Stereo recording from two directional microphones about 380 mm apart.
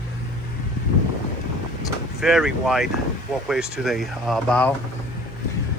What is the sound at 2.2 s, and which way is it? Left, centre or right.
Speech, centre.